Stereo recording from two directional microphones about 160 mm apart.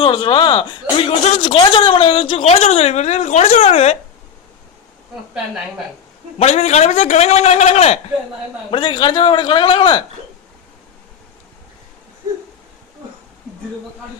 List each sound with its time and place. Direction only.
0.0 s speech: 30° left (ahead or behind)
6.4 s a man's voice: 45° left (ahead or behind)
8.7 s speech: 30° left (ahead or behind)